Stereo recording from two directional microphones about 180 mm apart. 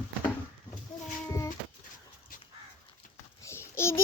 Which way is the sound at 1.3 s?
15° left (ahead or behind).